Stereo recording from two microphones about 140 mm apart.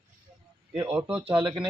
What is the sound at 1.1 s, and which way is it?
Speech, 40° right (ahead or behind).